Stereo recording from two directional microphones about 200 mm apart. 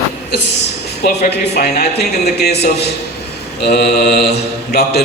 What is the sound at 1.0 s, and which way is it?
Speech, 55° left (ahead or behind).